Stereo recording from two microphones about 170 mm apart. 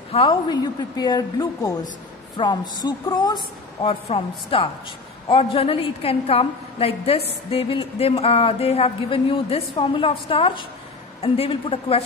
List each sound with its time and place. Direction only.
0.1 s a woman's voice: 30° left (ahead or behind)